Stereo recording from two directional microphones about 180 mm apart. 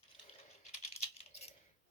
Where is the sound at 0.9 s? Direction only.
35° left (ahead or behind).